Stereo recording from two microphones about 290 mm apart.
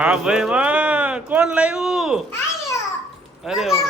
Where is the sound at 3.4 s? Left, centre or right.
Centre.